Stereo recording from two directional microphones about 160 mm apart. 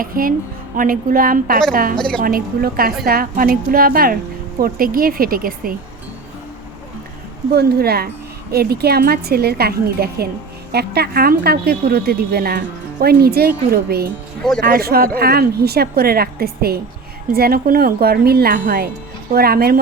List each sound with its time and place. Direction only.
0.0 s a woman's voice: 60° right (ahead or behind)
2.0 s a woman's voice: 5° left (ahead or behind)
2.2 s a woman's voice: 65° right (ahead or behind)
7.5 s a woman's voice: 80° right